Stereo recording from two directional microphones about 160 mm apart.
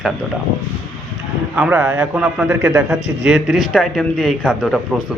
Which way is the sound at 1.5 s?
10° right (ahead or behind).